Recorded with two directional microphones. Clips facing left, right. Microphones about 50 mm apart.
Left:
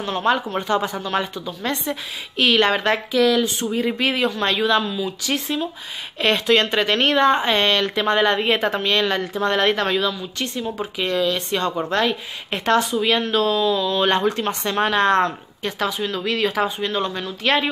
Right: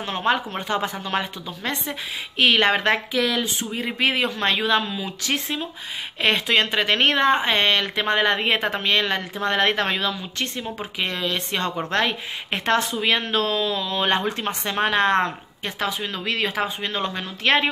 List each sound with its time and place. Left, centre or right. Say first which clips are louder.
0.0 s speech: left 2 dB; right